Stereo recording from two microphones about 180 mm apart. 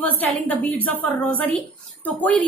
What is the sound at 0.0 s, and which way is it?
A woman's voice, 10° left (ahead or behind).